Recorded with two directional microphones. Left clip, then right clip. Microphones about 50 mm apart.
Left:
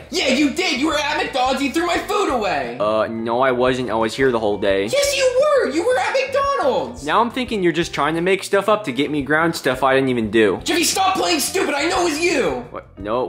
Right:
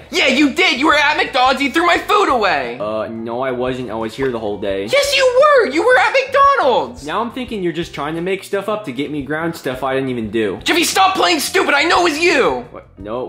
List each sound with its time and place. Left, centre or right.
0.1 s a woman's voice: right
2.8 s speech: left
4.9 s a woman's voice: right
7.1 s speech: left
9.3 s speech: centre
9.9 s speech: left
10.7 s a woman's voice: right